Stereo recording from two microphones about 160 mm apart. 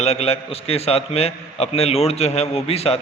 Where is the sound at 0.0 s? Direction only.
40° left (ahead or behind).